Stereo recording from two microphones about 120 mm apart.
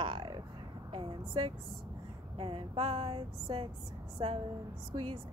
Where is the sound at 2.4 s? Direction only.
50° right (ahead or behind).